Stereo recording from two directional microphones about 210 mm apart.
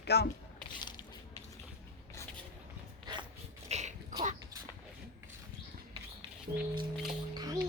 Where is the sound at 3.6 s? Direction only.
35° right (ahead or behind).